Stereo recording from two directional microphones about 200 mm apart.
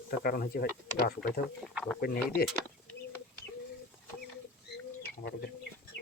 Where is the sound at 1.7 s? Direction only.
5° left (ahead or behind).